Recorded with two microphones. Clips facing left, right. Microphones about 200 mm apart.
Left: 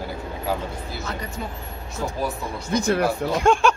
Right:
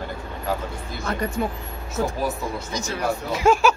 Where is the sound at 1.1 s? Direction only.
55° right (ahead or behind).